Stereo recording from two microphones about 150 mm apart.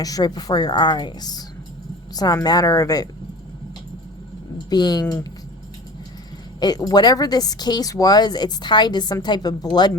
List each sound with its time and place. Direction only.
0.0 s speech: 25° left (ahead or behind)
4.5 s speech: 30° left (ahead or behind)
6.6 s speech: 25° left (ahead or behind)